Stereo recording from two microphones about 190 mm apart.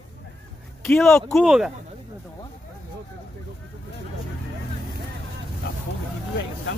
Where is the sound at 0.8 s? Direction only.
5° left (ahead or behind).